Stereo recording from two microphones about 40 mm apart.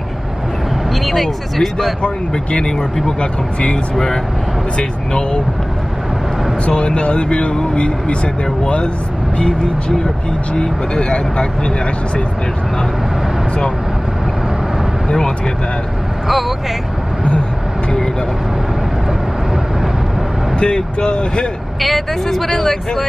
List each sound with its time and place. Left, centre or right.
1.0 s speech: centre
2.0 s speech: left
4.7 s speech: left
6.6 s speech: left
9.4 s speech: centre
15.0 s speech: centre
16.3 s speech: centre
20.5 s speech: left
21.8 s speech: centre